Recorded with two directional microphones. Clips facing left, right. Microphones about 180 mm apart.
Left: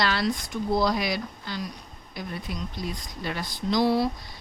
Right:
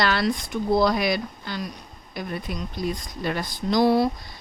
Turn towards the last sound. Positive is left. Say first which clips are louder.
# right 3 dB
turn(degrees=-50)  # may be behind; listen again after turning